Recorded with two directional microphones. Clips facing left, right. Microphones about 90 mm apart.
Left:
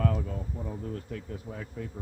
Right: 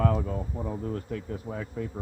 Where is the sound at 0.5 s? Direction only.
60° right (ahead or behind).